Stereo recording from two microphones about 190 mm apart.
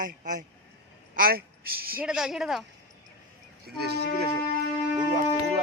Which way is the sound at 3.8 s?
60° right (ahead or behind).